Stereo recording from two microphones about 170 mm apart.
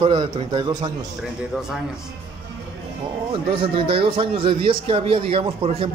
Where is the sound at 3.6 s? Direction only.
30° right (ahead or behind).